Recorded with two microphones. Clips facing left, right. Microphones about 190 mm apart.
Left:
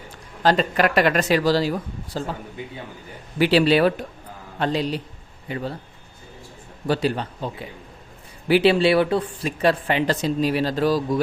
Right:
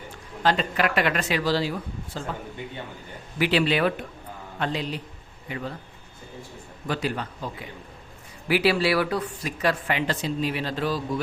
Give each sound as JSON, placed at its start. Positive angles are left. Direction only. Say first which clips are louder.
{"t": 0.4, "sound": "speech", "louder": "left 4 dB", "side_deg": 40}
{"t": 3.3, "sound": "speech", "louder": "left 6 dB", "side_deg": 35}
{"t": 6.8, "sound": "speech", "louder": "left 6 dB", "side_deg": 30}